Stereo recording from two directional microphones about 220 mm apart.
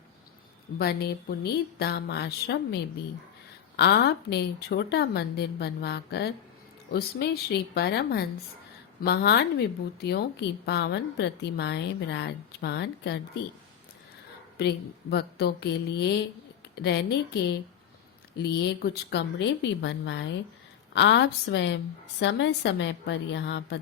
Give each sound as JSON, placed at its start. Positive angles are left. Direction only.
{"t": 0.8, "sound": "a woman's voice", "side_deg": 45}
{"t": 3.8, "sound": "a woman's voice", "side_deg": 50}
{"t": 15.1, "sound": "a woman's voice", "side_deg": 45}